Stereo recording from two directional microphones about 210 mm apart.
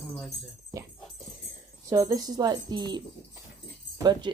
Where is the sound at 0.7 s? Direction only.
15° right (ahead or behind).